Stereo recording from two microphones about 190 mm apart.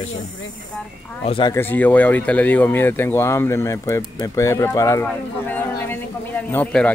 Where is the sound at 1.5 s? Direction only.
10° left (ahead or behind).